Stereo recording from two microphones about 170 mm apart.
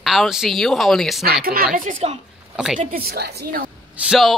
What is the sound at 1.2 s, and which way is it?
Speech, 65° right (ahead or behind).